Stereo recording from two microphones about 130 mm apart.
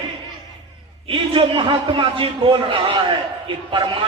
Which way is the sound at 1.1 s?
40° right (ahead or behind).